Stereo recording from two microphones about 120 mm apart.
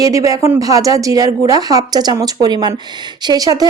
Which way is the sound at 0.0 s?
30° right (ahead or behind).